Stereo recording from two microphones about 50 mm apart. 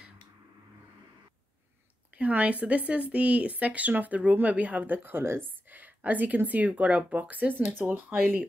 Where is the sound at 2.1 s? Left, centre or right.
Right.